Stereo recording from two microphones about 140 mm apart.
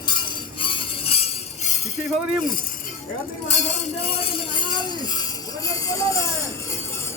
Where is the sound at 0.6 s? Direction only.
40° left (ahead or behind).